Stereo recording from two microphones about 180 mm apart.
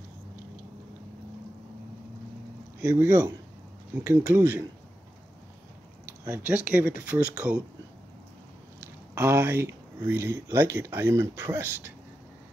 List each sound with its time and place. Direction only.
2.8 s speech: 15° right (ahead or behind)
6.0 s speech: 10° right (ahead or behind)
9.1 s speech: 10° right (ahead or behind)